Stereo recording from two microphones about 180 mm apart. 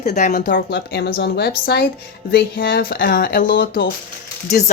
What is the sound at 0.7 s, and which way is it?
Speech, 65° left (ahead or behind).